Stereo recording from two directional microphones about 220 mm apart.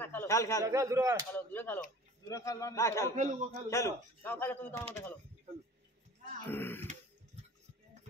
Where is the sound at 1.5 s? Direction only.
10° left (ahead or behind).